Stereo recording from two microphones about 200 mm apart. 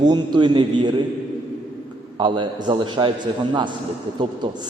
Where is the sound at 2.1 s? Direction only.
25° right (ahead or behind).